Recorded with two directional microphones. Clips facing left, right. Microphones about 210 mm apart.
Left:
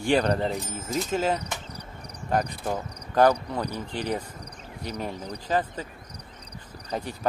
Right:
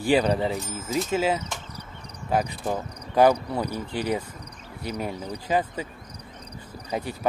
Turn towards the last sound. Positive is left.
turn(degrees=-10)  # may be behind; listen again after turning